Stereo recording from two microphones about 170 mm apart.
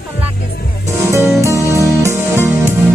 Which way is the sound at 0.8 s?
15° right (ahead or behind).